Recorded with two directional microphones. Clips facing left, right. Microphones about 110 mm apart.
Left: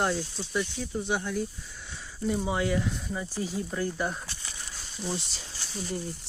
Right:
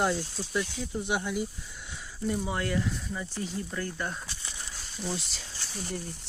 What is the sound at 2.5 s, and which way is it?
Speech, 5° left (ahead or behind).